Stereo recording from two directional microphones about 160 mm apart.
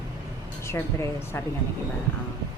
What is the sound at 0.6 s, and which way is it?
Speech, 15° left (ahead or behind).